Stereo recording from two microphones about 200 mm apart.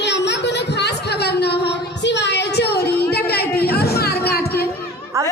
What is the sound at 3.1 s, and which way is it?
Chatter, 50° left (ahead or behind).